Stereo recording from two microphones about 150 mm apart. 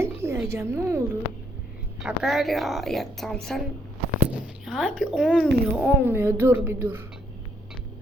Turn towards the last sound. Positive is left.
turn(degrees=-15)  # may be behind; listen again after turning